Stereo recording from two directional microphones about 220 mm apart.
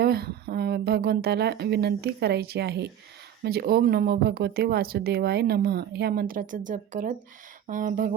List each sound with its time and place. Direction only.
0.0 s speech: 45° right (ahead or behind)